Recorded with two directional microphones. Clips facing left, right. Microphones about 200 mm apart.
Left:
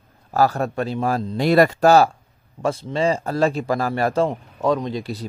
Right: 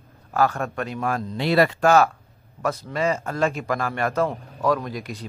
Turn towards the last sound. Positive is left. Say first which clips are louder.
# left 4 dB
turn(degrees=30)  # may be behind; listen again after turning